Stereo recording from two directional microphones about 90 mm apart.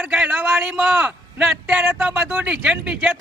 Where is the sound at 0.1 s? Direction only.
5° right (ahead or behind).